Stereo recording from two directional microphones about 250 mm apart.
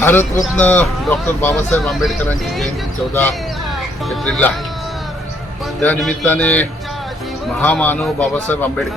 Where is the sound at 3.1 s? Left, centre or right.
Centre.